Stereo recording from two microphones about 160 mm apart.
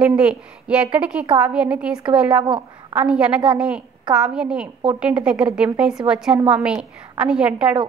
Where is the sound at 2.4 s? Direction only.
30° right (ahead or behind).